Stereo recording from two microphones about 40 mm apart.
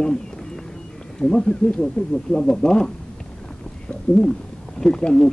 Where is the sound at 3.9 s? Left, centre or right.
Centre.